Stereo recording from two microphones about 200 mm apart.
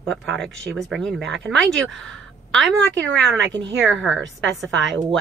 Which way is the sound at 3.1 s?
65° right (ahead or behind).